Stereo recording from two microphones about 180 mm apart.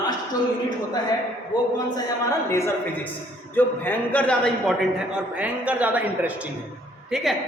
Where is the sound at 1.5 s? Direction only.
25° left (ahead or behind); by 4.7 s 10° left (ahead or behind).